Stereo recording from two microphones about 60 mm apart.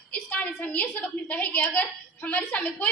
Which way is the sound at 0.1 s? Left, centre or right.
Left.